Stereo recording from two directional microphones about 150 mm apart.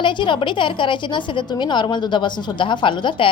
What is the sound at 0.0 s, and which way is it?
A woman's voice, 30° left (ahead or behind).